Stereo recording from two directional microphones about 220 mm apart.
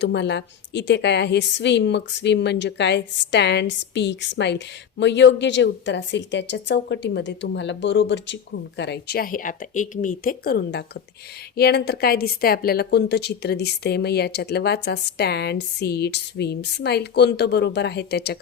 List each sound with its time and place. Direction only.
0.0 s a woman's voice: 50° left (ahead or behind)